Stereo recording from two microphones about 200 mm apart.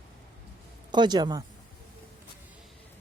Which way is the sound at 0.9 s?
20° right (ahead or behind).